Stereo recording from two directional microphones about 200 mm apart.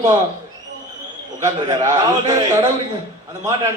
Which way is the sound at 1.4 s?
20° right (ahead or behind).